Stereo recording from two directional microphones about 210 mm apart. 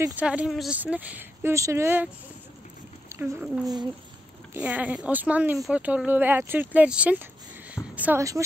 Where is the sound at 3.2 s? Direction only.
15° right (ahead or behind).